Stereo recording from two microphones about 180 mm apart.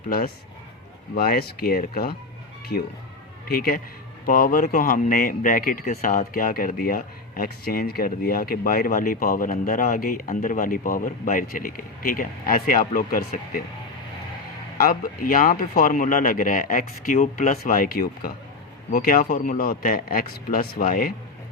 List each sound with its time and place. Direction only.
1.1 s speech: 55° left (ahead or behind)
3.5 s speech: 55° left (ahead or behind)
14.8 s speech: 50° left (ahead or behind)
17.6 s speech: 55° left (ahead or behind)